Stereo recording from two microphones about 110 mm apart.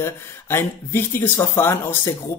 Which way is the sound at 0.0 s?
25° left (ahead or behind).